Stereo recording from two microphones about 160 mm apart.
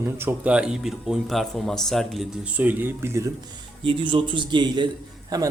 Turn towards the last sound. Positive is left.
turn(degrees=-25)  # may be behind; listen again after turning